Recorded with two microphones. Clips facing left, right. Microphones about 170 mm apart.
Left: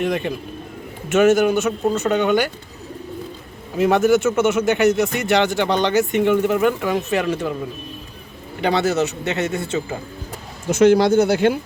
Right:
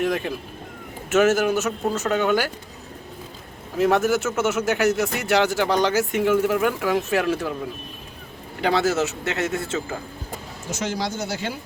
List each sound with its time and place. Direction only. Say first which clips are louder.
0.0 s speech: left 2 dB; centre (ahead or behind)
3.8 s speech: left 4 dB; centre (ahead or behind)
8.6 s speech: left 2 dB; centre (ahead or behind)
10.7 s speech: left 14 dB; 60° left (ahead or behind)